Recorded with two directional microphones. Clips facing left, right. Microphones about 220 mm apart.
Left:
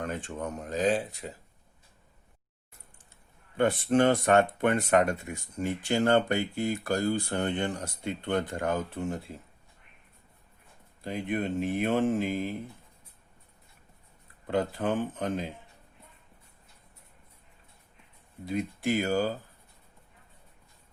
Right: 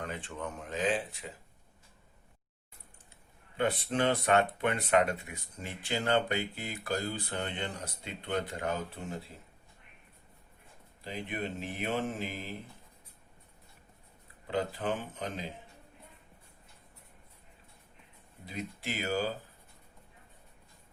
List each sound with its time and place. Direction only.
0.0 s speech: 45° left (ahead or behind)
3.6 s speech: 45° left (ahead or behind)
11.0 s speech: 50° left (ahead or behind)
14.4 s speech: 50° left (ahead or behind)
18.4 s speech: 50° left (ahead or behind)